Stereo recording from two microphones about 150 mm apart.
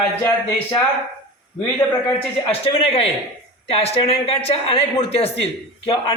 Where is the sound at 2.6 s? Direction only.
40° left (ahead or behind).